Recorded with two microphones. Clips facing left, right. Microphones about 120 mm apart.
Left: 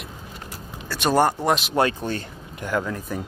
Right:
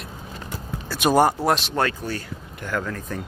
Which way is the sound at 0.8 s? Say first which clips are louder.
Right 1 dB; 10° right (ahead or behind).